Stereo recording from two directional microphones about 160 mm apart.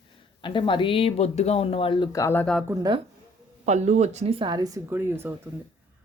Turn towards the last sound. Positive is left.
turn(degrees=-15)  # may be behind; listen again after turning